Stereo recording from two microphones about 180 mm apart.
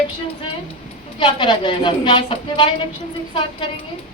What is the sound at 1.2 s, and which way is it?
A woman's voice, 25° left (ahead or behind).